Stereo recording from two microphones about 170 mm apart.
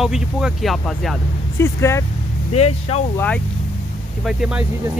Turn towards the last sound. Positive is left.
turn(degrees=-5)  # may be behind; listen again after turning